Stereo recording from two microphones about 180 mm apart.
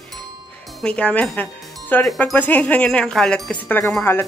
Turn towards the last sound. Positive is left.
turn(degrees=10)  # may be behind; listen again after turning